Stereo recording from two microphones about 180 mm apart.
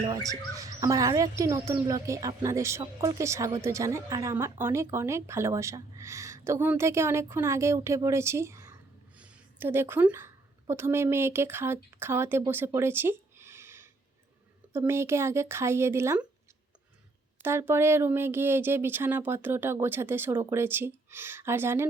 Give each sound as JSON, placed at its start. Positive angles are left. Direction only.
{"t": 0.3, "sound": "a woman's voice", "side_deg": -20}
{"t": 17.4, "sound": "speech", "side_deg": -15}